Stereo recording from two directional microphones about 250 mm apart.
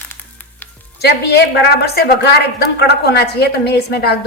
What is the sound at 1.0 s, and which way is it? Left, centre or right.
A woman's voice, left.